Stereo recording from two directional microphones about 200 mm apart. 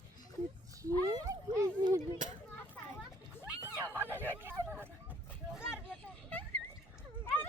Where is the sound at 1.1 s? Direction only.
20° right (ahead or behind).